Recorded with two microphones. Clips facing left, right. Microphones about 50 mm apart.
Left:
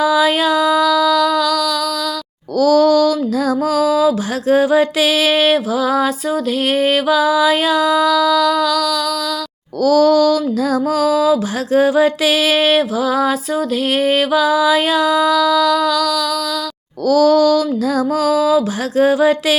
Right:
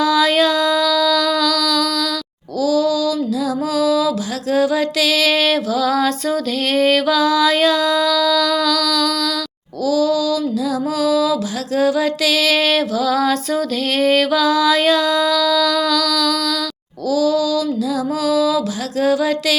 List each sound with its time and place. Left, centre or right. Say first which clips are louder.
0.0 s a sound: left 1 dB; centre
2.6 s music: left 5 dB; left; by 9.1 s centre
9.8 s music: left 5 dB; left; by 16.4 s centre
17.1 s music: left 5 dB; left